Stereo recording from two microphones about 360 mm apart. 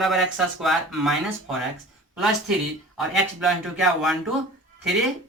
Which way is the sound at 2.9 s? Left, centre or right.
Centre.